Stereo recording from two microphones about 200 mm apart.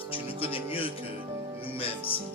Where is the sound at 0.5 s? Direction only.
25° left (ahead or behind).